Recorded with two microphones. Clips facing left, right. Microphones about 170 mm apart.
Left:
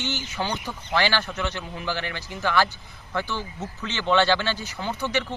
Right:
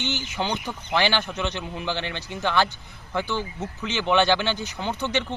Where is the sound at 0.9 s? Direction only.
15° right (ahead or behind).